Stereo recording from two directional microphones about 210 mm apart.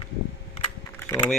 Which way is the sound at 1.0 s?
15° left (ahead or behind).